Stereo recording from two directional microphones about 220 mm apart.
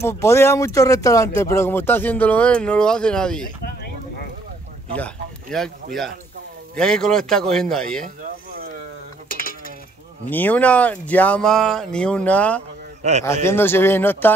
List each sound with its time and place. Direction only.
0.0 s speech: 10° left (ahead or behind)
4.9 s speech: 5° left (ahead or behind)
6.7 s speech: 5° left (ahead or behind)
9.3 s cutlery: 40° left (ahead or behind)
10.3 s speech: 5° left (ahead or behind)